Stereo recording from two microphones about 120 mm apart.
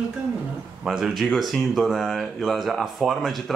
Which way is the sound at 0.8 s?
5° right (ahead or behind).